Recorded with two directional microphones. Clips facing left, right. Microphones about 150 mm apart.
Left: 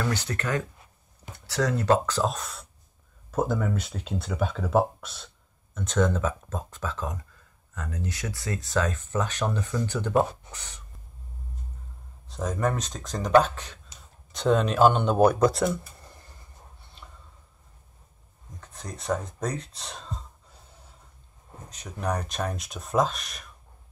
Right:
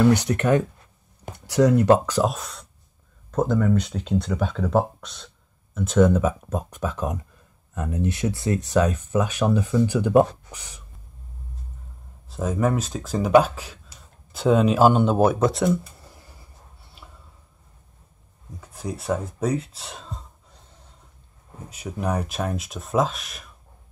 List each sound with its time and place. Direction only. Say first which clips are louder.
0.0 s speech: right 11 dB; 15° right (ahead or behind)
3.3 s speech: right 5 dB; 5° left (ahead or behind)
5.8 s speech: right 7 dB; 5° right (ahead or behind)
12.3 s speech: right 4 dB; 5° right (ahead or behind)
17.0 s a sound: right 1 dB; 5° right (ahead or behind)
18.6 s speech: right 8 dB; 5° right (ahead or behind)
21.6 s speech: right 3 dB; 10° right (ahead or behind)